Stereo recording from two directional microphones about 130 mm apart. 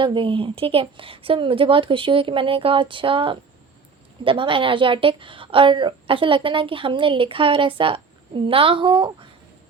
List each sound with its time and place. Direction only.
0.0 s a woman's voice: 40° right (ahead or behind)